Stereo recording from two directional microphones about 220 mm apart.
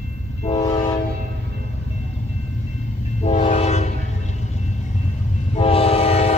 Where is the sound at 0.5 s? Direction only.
20° left (ahead or behind).